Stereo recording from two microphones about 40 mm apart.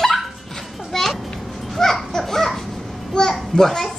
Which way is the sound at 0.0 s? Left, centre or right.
Centre.